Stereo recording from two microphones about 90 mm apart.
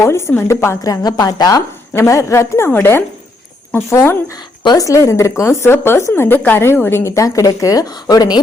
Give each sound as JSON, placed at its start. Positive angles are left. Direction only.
{"t": 0.0, "sound": "a woman's voice", "side_deg": 30}
{"t": 1.9, "sound": "a woman's voice", "side_deg": 35}